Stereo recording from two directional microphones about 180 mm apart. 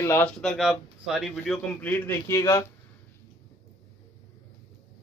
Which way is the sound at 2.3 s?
15° left (ahead or behind).